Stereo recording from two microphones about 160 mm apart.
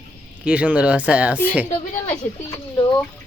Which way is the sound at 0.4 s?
5° right (ahead or behind).